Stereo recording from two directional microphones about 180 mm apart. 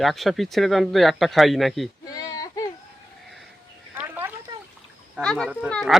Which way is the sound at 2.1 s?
20° left (ahead or behind).